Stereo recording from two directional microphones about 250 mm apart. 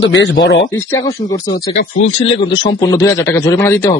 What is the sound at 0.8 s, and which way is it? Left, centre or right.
A man's voice, centre.